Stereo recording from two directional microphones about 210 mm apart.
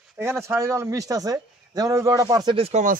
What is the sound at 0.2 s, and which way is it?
Speech, 10° right (ahead or behind).